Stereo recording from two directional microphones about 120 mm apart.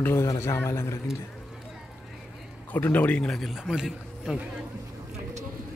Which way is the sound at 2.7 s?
15° left (ahead or behind).